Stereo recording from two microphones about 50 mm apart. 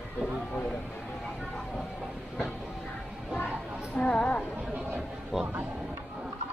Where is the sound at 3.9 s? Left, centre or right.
Left.